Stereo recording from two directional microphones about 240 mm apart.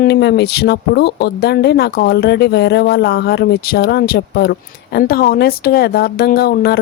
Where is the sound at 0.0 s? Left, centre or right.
Left.